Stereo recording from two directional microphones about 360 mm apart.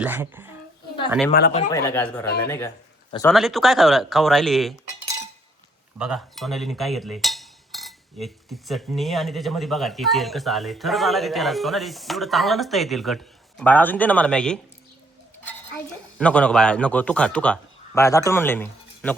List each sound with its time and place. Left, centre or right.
0.0 s cutlery: centre
1.3 s speech: left
1.7 s cutlery: centre
6.0 s cutlery: centre
16.1 s cutlery: centre